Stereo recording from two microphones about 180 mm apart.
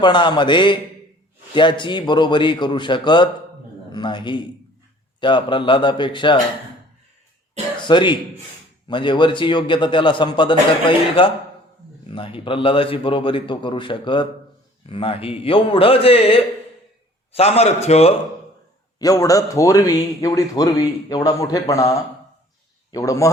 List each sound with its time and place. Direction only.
0.0 s a man's voice: 25° left (ahead or behind)
7.9 s a man's voice: 25° left (ahead or behind)
18.9 s a man's voice: 20° left (ahead or behind)